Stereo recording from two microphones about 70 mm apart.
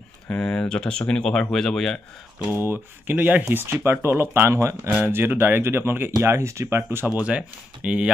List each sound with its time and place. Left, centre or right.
0.3 s speech: centre
2.5 s speech: right
3.4 s speech: right
7.1 s speech: centre